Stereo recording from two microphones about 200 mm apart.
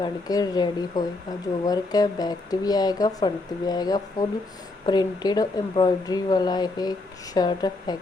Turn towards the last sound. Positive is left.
turn(degrees=20)  # may be behind; listen again after turning